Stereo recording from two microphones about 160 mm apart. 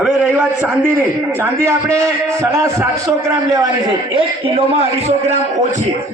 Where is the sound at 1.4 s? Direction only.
15° right (ahead or behind); by 5.8 s 45° right (ahead or behind).